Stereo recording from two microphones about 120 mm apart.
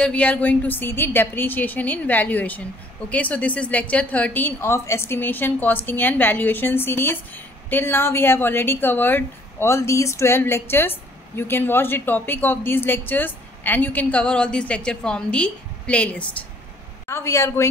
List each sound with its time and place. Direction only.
0.0 s a woman's voice: 10° left (ahead or behind)
17.1 s a woman's voice: 25° left (ahead or behind)